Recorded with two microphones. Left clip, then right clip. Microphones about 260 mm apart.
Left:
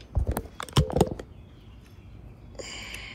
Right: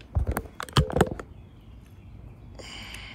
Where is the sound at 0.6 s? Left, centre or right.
Left.